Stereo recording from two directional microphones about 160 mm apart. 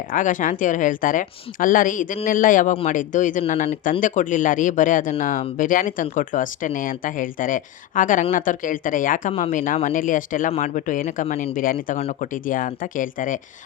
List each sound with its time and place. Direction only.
0.1 s speech: 55° left (ahead or behind)